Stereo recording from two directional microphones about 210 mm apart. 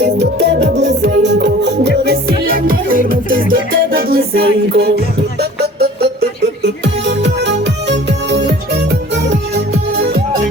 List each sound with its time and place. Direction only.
0.0 s music: 55° right (ahead or behind)